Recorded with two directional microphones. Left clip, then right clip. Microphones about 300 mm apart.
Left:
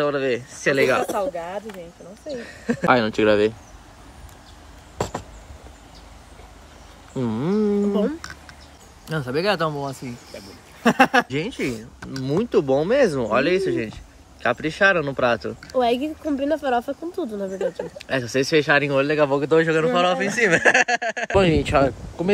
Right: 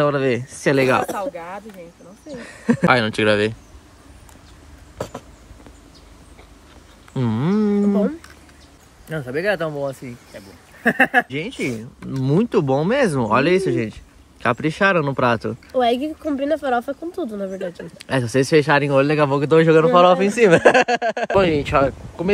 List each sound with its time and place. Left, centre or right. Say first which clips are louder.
0.0 s speech: right 3 dB; centre
2.3 s speech: right 5 dB; centre
7.2 s speech: right 1 dB; right
9.1 s speech: right 1 dB; centre
11.2 s speech: even; centre
11.7 s speech: right 3 dB; centre
20.6 s a sound: right 3 dB; right
21.4 s speech: right 1 dB; centre